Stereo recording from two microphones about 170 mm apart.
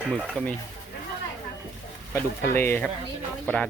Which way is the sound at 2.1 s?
15° left (ahead or behind).